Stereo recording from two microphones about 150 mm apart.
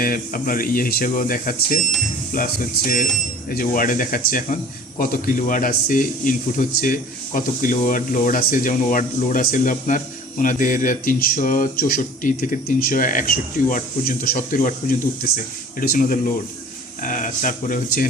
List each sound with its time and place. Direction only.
0.0 s speech: 70° left (ahead or behind)